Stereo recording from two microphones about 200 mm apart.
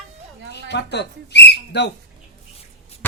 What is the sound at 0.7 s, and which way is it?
Speech, 55° left (ahead or behind).